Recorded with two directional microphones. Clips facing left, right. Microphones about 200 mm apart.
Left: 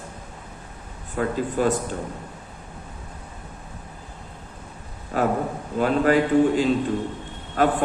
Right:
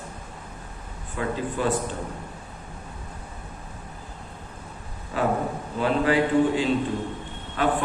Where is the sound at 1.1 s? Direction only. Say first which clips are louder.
Left 4 dB; 45° left (ahead or behind).